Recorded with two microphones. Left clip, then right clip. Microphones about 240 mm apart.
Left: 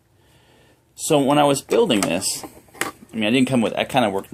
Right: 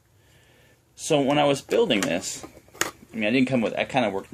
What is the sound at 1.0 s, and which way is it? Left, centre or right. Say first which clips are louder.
Speech: left 4 dB; left.